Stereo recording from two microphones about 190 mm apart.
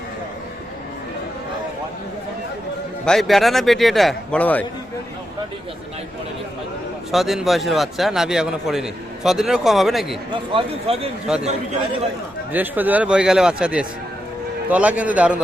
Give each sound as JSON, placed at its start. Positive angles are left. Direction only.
{"t": 3.1, "sound": "a man's voice", "side_deg": 0}
{"t": 7.1, "sound": "a man's voice", "side_deg": 0}
{"t": 10.5, "sound": "speech", "side_deg": -30}
{"t": 12.5, "sound": "a man's voice", "side_deg": -10}